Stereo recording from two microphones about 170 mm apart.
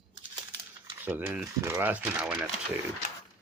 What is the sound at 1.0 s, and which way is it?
Speech, 10° right (ahead or behind).